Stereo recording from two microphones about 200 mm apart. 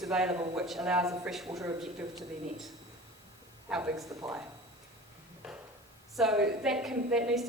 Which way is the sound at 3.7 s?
5° right (ahead or behind).